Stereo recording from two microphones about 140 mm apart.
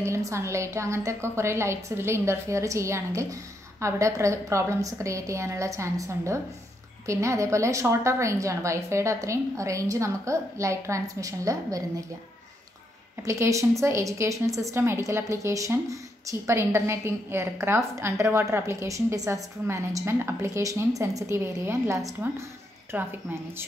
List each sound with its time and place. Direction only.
0.0 s a woman's voice: 20° right (ahead or behind)
13.2 s a woman's voice: 20° right (ahead or behind)